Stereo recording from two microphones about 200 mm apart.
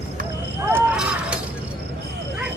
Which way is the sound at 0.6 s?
10° right (ahead or behind).